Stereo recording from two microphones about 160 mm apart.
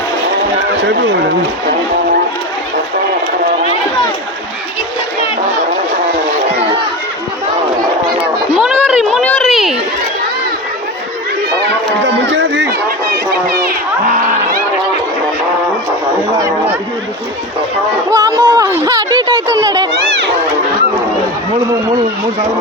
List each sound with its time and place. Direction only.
8.5 s a sound: 5° right (ahead or behind)
12.0 s run: 90° right
18.1 s speech: 25° right (ahead or behind)